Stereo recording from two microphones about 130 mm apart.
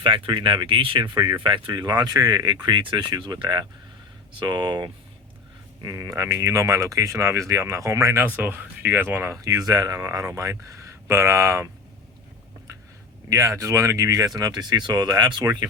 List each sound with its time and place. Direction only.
0.0 s speech: 40° right (ahead or behind); by 11.7 s 20° right (ahead or behind)
13.3 s speech: 25° right (ahead or behind)